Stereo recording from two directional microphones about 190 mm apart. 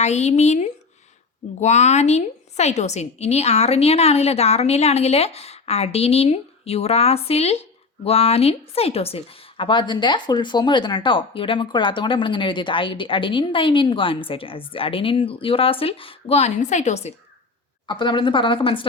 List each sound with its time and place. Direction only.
0.0 s a woman's voice: 35° left (ahead or behind)
17.8 s a woman's voice: 25° left (ahead or behind)